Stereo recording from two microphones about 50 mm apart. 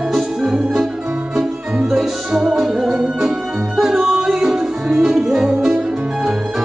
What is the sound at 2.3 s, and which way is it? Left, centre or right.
Music, centre.